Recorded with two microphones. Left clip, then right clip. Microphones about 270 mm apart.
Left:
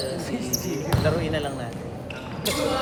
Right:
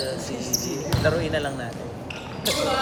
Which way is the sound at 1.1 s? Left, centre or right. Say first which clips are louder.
Right 3 dB; right.